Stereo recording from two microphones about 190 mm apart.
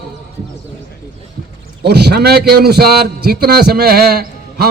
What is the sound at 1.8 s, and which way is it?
A man's voice, 60° right (ahead or behind).